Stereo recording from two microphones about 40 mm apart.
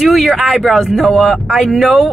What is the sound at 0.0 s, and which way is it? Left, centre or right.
Speech, centre.